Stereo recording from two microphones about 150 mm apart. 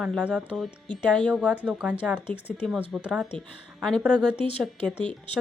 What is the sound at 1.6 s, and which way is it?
Speech, 5° right (ahead or behind).